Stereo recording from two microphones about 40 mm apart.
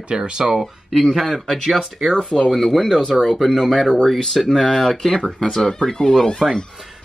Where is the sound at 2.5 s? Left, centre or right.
Centre.